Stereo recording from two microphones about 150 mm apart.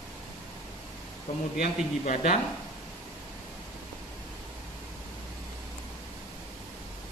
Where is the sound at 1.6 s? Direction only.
55° left (ahead or behind).